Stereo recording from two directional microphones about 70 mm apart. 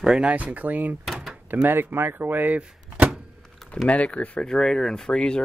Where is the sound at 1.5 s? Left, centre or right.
Right.